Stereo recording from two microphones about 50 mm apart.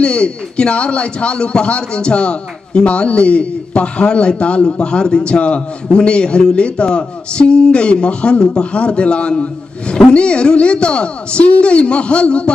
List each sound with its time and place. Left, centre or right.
0.0 s speech: left